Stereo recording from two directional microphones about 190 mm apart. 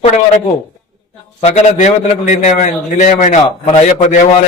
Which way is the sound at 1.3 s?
35° left (ahead or behind).